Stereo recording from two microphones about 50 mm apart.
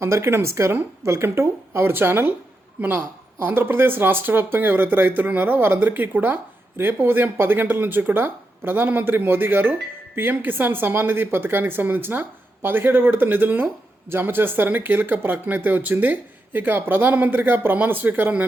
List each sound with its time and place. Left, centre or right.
0.0 s speech: right
3.4 s speech: right